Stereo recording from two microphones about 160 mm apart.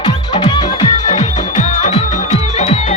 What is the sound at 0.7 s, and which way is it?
Music, 40° left (ahead or behind).